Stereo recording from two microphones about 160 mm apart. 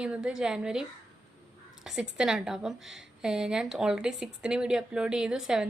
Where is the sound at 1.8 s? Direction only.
5° right (ahead or behind).